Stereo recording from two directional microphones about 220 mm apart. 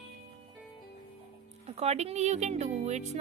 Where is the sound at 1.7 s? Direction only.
30° right (ahead or behind).